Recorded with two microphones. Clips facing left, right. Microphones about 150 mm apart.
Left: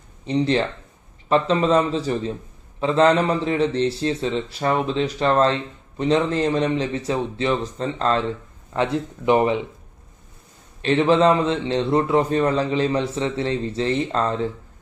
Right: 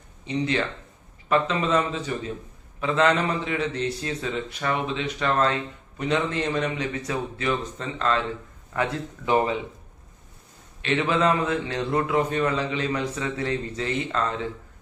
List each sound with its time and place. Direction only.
0.3 s a man's voice: 35° left (ahead or behind)
8.7 s speech: 25° left (ahead or behind)
10.8 s a man's voice: 35° left (ahead or behind)